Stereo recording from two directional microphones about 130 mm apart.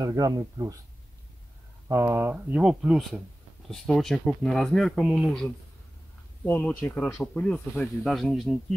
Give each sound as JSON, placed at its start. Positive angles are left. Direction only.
{"t": 0.0, "sound": "speech", "side_deg": -25}
{"t": 1.9, "sound": "speech", "side_deg": -20}
{"t": 2.5, "sound": "speech", "side_deg": -5}